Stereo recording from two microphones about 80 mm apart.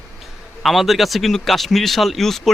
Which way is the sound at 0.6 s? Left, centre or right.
Centre.